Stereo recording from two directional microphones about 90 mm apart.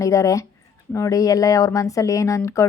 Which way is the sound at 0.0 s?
40° left (ahead or behind).